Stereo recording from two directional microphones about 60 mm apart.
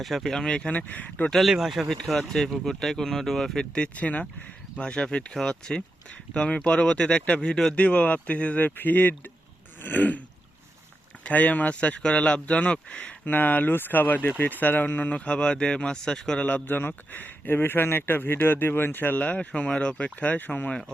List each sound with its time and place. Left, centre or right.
0.0 s speech: centre; by 1.3 s left
1.3 s speech: centre
3.9 s speech: left
7.8 s speech: left
8.6 s speech: left
13.2 s speech: left
15.1 s speech: centre
16.5 s speech: left